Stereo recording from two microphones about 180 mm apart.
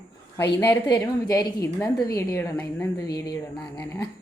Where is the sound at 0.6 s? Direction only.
10° left (ahead or behind).